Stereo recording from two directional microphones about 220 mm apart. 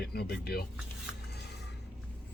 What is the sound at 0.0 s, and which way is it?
Speech, 45° left (ahead or behind).